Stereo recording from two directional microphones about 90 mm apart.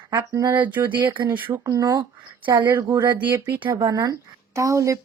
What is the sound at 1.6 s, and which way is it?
Speech, 40° right (ahead or behind).